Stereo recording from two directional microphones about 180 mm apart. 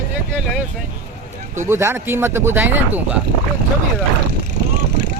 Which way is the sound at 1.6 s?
15° right (ahead or behind).